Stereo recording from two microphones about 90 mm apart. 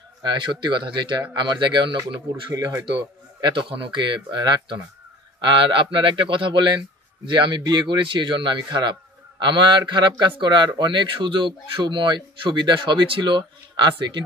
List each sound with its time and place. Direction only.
0.2 s speech: 60° right (ahead or behind)
3.3 s speech: 60° right (ahead or behind)